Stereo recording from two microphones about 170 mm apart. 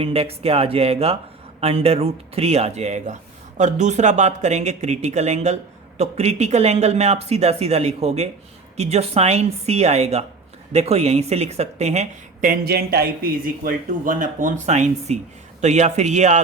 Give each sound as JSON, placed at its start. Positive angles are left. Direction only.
{"t": 0.0, "sound": "speech", "side_deg": -35}